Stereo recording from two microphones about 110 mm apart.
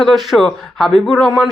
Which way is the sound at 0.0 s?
Centre (ahead or behind).